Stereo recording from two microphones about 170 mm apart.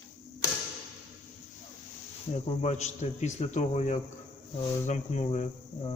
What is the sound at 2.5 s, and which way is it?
A man's voice, 40° left (ahead or behind).